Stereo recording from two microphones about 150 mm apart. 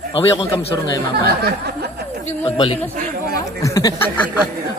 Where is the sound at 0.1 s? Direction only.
40° left (ahead or behind).